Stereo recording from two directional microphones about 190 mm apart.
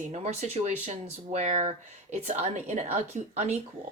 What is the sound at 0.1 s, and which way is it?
Speech, 35° right (ahead or behind).